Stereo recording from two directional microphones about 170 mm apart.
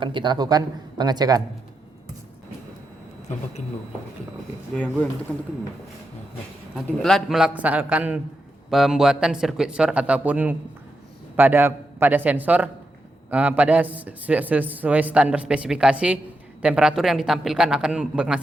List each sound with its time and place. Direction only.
0.0 s speech: 30° right (ahead or behind)
4.7 s speech: 5° left (ahead or behind)
6.8 s a man's voice: centre (ahead or behind)